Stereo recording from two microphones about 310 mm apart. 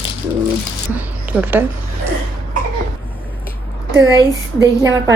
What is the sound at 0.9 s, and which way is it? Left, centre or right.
Speech, centre.